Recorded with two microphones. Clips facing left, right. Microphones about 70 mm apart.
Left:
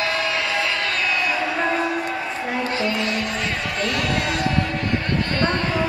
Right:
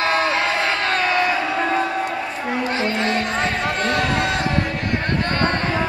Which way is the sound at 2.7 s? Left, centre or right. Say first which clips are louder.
Right 4 dB; right.